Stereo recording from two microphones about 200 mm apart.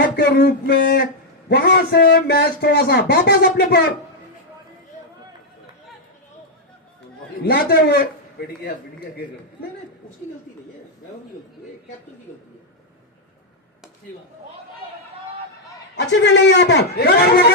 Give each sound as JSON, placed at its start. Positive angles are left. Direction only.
{"t": 0.2, "sound": "a man's voice", "side_deg": 55}
{"t": 7.4, "sound": "speech", "side_deg": 50}
{"t": 16.2, "sound": "a man's voice", "side_deg": 60}